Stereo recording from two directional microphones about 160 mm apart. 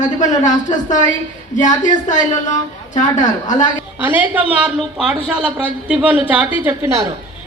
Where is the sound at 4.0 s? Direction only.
10° right (ahead or behind).